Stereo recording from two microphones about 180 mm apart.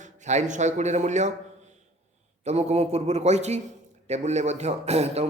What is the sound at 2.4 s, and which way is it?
A man's voice, 35° right (ahead or behind).